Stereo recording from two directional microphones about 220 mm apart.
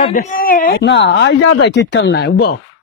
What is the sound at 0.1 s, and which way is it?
Speech, 40° left (ahead or behind).